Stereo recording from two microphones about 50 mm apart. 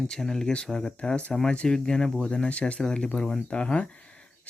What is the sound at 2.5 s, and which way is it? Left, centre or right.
Speech, left.